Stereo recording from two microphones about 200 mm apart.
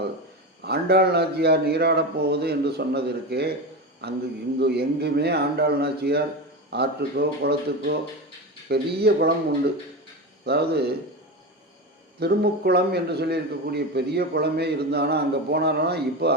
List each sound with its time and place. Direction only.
0.6 s a man's voice: 55° right (ahead or behind)
10.4 s a man's voice: 55° right (ahead or behind)
12.2 s a man's voice: 55° right (ahead or behind)